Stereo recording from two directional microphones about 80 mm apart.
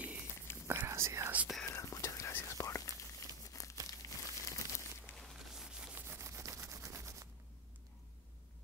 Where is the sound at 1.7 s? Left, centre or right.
Left.